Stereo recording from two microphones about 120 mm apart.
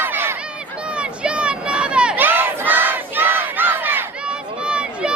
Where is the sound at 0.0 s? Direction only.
20° right (ahead or behind).